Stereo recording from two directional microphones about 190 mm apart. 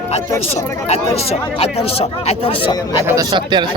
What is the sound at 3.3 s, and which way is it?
Speech, 25° right (ahead or behind).